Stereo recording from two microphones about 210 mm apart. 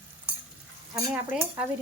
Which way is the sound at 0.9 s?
10° right (ahead or behind).